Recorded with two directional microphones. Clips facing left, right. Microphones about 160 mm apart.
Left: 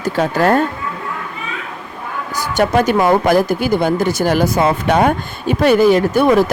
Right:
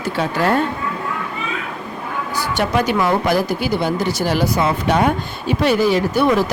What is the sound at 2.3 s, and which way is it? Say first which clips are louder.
A woman's voice: left 4 dB; 45° left (ahead or behind).